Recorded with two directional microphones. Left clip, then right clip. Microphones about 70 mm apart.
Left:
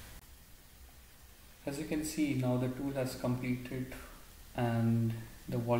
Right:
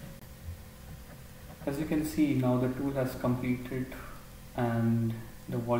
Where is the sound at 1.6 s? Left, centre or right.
Centre.